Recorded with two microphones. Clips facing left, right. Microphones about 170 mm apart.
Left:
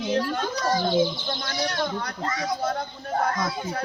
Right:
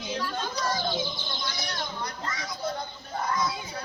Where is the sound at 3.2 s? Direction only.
65° left (ahead or behind).